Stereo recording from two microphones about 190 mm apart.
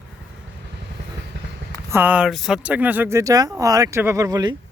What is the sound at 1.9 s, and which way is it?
Speech, 10° right (ahead or behind).